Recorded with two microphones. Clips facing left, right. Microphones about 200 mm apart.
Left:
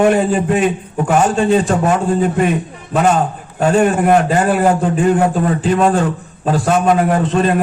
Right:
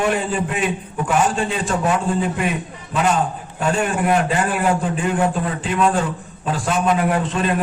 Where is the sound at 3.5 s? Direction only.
40° left (ahead or behind).